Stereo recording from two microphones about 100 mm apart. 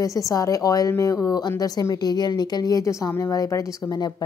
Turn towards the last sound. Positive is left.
turn(degrees=45)  # may be behind; listen again after turning